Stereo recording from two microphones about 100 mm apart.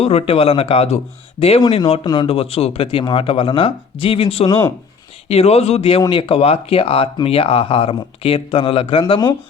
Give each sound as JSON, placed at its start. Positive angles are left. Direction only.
{"t": 0.0, "sound": "speech", "side_deg": 90}
{"t": 1.6, "sound": "speech", "side_deg": 50}
{"t": 2.2, "sound": "speech", "side_deg": 70}
{"t": 3.0, "sound": "speech", "side_deg": 60}
{"t": 5.3, "sound": "speech", "side_deg": 90}
{"t": 6.0, "sound": "speech", "side_deg": 55}